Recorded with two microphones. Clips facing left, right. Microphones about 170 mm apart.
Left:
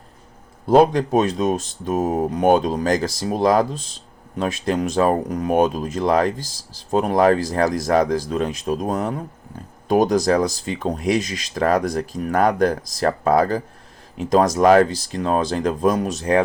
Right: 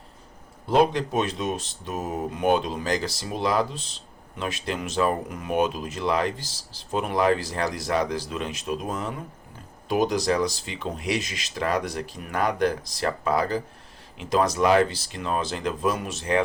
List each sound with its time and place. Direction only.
0.7 s speech: 45° left (ahead or behind)